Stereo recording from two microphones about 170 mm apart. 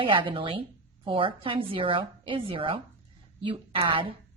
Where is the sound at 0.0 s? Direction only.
30° right (ahead or behind).